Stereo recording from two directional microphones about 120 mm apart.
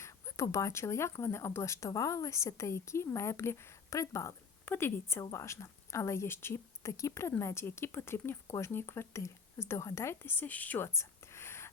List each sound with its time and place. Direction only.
0.0 s a woman's voice: 25° left (ahead or behind)